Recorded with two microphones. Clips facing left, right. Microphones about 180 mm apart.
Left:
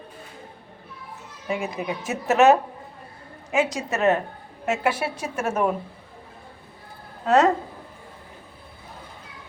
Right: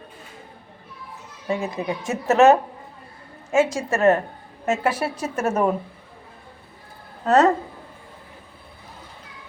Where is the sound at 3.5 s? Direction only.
20° left (ahead or behind).